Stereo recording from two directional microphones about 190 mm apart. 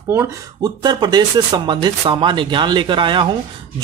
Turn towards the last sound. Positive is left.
turn(degrees=-25)  # may be behind; listen again after turning